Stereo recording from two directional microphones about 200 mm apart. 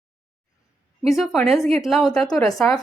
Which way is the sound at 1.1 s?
Centre (ahead or behind).